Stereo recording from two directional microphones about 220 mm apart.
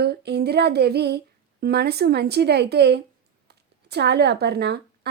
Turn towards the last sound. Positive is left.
turn(degrees=-50)  # may be behind; listen again after turning